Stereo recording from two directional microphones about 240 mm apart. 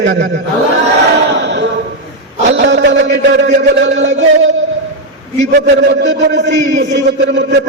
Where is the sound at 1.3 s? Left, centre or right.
Right.